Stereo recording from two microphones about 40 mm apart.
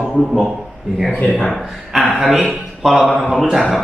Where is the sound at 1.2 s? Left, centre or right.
Left.